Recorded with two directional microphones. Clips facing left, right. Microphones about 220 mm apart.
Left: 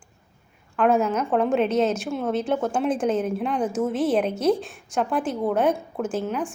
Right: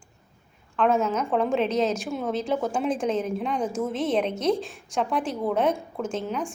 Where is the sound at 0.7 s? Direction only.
10° left (ahead or behind).